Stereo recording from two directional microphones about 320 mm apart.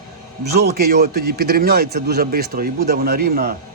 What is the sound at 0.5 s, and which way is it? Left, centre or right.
A man's voice, right.